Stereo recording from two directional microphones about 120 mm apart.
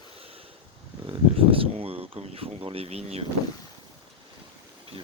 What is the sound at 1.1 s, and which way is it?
Speech, 50° right (ahead or behind).